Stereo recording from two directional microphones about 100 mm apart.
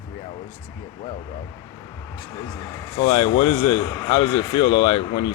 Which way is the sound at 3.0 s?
55° left (ahead or behind).